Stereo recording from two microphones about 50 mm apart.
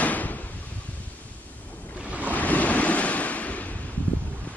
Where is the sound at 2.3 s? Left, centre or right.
Left.